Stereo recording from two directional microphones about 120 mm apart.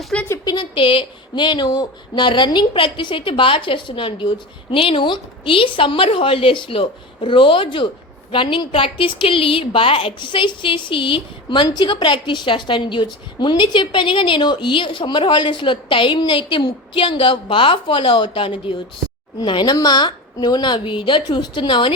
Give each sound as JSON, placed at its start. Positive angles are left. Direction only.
{"t": 0.1, "sound": "speech", "side_deg": 10}
{"t": 0.4, "sound": "a woman's voice", "side_deg": 40}